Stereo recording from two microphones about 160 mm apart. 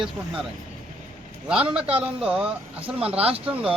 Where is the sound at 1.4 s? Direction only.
5° right (ahead or behind).